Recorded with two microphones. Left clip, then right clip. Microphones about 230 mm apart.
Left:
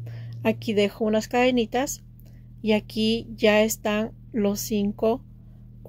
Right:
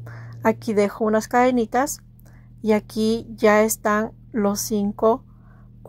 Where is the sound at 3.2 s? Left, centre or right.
Centre.